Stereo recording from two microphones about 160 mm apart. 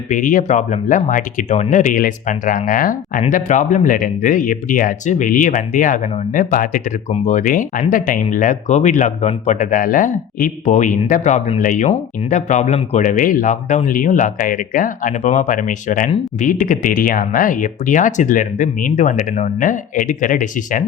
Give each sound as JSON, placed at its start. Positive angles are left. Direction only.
{"t": 0.1, "sound": "speech", "side_deg": 55}